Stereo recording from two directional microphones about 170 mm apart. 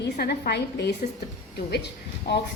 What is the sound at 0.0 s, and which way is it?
Speech, 70° left (ahead or behind).